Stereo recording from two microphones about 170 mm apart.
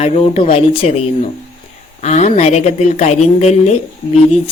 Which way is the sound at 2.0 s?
40° left (ahead or behind).